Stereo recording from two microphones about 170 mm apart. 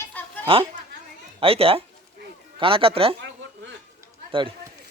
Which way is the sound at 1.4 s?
35° right (ahead or behind).